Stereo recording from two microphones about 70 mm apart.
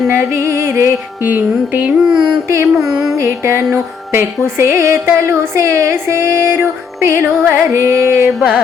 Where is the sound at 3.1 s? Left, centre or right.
Right.